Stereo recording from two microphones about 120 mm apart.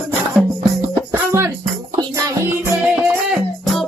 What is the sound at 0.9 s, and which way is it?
Music, 25° right (ahead or behind).